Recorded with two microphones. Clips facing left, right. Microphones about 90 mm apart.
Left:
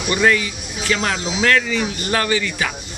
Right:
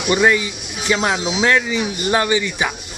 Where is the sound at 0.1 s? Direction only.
20° right (ahead or behind).